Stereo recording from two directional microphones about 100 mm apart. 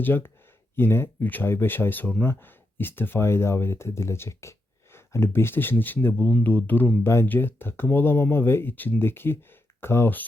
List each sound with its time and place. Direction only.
0.0 s speech: 20° left (ahead or behind)